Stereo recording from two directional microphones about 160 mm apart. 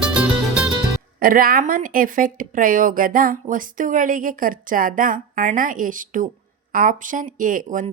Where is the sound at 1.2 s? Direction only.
65° right (ahead or behind).